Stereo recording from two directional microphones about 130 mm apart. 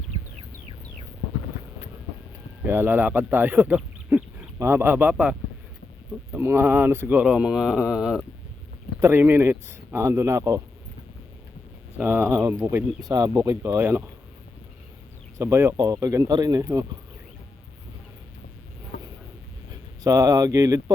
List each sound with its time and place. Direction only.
2.6 s speech: 15° right (ahead or behind)
9.0 s speech: 15° right (ahead or behind)
11.9 s speech: 15° right (ahead or behind)
13.0 s speech: 30° right (ahead or behind)
15.4 s speech: 20° right (ahead or behind)
20.1 s speech: 25° right (ahead or behind)